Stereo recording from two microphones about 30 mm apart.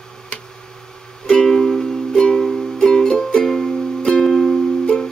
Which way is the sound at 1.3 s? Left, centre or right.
Left.